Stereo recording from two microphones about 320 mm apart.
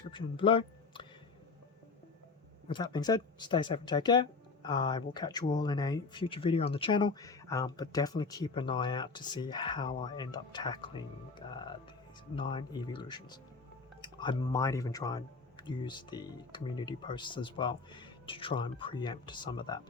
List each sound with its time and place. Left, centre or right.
0.1 s speech: centre
2.6 s speech: centre